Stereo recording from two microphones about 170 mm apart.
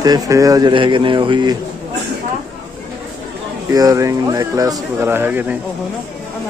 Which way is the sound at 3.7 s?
20° right (ahead or behind).